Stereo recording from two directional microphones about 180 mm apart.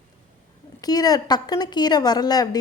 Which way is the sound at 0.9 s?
20° left (ahead or behind).